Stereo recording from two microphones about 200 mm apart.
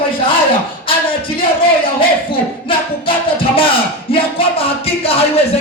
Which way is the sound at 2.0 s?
25° left (ahead or behind).